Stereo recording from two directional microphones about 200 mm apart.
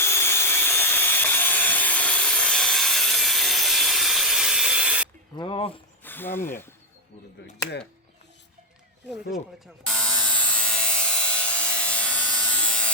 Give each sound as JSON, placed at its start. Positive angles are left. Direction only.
{"t": 0.0, "sound": "wood", "side_deg": 10}
{"t": 5.4, "sound": "speech", "side_deg": 25}
{"t": 6.0, "sound": "speech", "side_deg": 10}
{"t": 9.8, "sound": "a sound", "side_deg": 5}